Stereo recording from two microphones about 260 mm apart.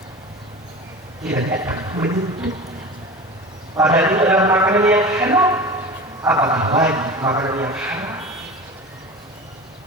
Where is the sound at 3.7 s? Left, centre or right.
Centre.